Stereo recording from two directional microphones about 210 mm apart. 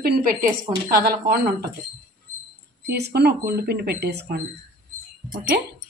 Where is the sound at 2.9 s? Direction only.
50° right (ahead or behind).